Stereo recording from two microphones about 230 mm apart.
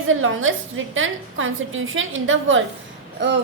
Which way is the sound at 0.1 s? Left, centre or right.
Right.